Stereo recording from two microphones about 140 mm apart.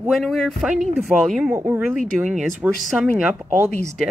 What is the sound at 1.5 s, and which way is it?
Speech, 15° right (ahead or behind).